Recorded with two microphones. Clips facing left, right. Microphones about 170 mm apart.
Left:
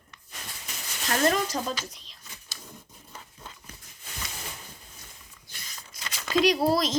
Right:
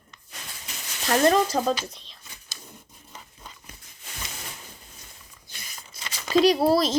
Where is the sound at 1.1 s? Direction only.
30° right (ahead or behind).